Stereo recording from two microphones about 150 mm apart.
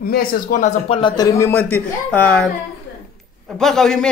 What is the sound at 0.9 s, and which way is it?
Speech, 30° left (ahead or behind).